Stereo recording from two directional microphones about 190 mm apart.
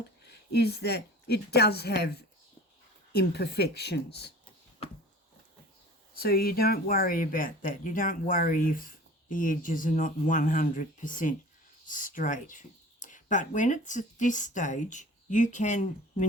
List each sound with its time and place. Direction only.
0.3 s speech: 60° left (ahead or behind)
6.1 s speech: 50° left (ahead or behind)